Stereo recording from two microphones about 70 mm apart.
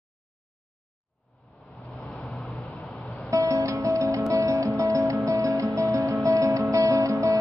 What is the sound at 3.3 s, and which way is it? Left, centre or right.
Music, right.